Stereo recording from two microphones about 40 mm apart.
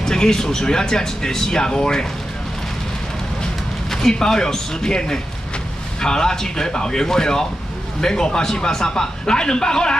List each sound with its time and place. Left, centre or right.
0.0 s speech: centre
3.9 s speech: centre